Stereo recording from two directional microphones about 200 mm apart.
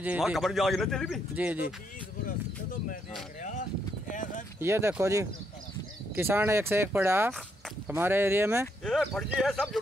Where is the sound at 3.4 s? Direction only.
40° left (ahead or behind).